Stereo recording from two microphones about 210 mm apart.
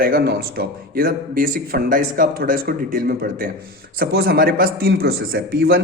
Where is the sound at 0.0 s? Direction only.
45° right (ahead or behind).